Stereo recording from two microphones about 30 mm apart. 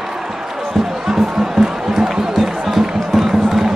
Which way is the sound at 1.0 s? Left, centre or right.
Centre.